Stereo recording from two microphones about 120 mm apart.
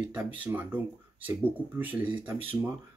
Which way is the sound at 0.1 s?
15° right (ahead or behind).